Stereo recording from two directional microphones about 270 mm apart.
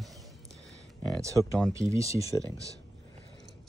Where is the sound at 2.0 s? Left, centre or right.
Left.